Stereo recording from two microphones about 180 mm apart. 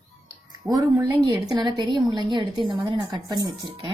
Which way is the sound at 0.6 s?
20° right (ahead or behind).